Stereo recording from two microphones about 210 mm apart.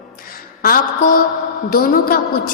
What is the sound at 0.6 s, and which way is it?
A woman's voice, 45° left (ahead or behind).